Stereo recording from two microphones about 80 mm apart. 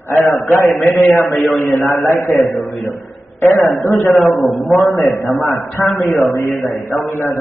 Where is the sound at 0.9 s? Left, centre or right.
Left.